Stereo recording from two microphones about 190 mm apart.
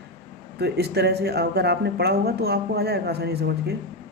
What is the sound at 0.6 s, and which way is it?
Speech, 60° right (ahead or behind).